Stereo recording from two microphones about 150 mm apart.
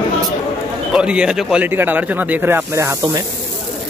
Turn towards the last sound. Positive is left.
turn(degrees=-20)  # may be behind; listen again after turning